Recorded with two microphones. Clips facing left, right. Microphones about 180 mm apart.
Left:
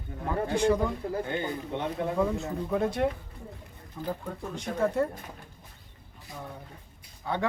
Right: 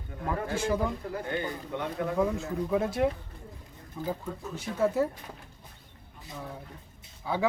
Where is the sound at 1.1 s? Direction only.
25° left (ahead or behind).